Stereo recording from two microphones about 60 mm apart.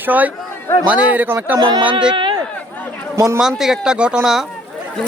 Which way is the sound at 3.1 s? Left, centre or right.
Right.